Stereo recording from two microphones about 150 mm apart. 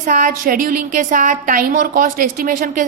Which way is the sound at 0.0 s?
60° right (ahead or behind).